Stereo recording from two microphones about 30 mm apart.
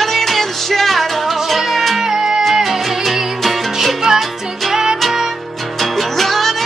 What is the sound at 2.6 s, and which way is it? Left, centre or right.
Music, centre.